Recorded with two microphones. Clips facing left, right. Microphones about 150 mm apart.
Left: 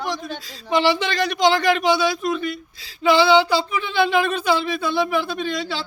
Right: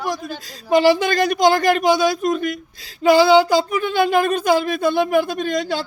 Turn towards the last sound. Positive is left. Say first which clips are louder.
# right 4 dB
turn(degrees=-45)  # may be behind; listen again after turning